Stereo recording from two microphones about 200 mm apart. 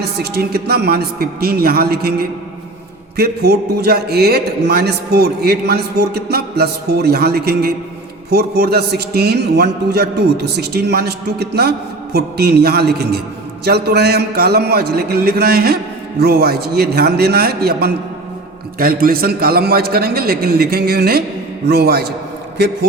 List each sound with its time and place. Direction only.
0.0 s a man's voice: 55° right (ahead or behind)